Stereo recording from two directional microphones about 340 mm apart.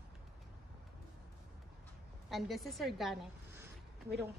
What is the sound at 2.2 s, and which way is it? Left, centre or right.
Speech, centre.